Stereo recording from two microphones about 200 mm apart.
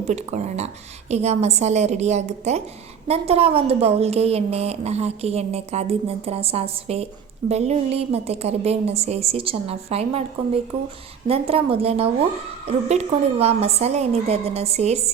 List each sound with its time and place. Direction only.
0.0 s a woman's voice: 35° right (ahead or behind)